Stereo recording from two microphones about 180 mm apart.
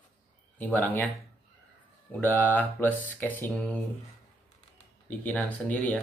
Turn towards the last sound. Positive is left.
turn(degrees=5)  # may be behind; listen again after turning